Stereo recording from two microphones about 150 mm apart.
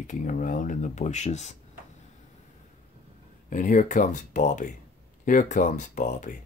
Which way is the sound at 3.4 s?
60° left (ahead or behind).